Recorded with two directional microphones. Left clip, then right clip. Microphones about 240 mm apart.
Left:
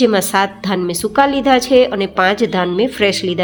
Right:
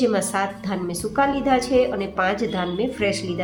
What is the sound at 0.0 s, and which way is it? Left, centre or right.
A woman's voice, left.